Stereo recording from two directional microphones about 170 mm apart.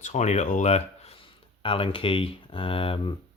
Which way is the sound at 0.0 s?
45° left (ahead or behind).